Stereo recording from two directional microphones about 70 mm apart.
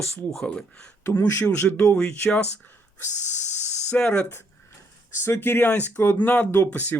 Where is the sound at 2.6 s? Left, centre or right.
Left.